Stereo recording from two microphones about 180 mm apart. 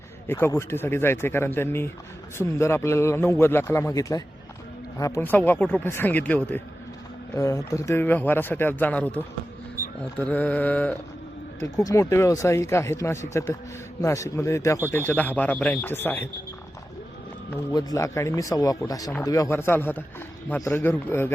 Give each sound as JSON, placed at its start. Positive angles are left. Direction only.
{"t": 0.3, "sound": "speech", "side_deg": 10}
{"t": 17.5, "sound": "a man's voice", "side_deg": 20}